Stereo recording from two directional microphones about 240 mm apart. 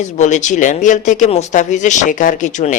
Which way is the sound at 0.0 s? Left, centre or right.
Left.